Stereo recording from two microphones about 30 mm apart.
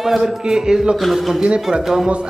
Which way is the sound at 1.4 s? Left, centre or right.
Right.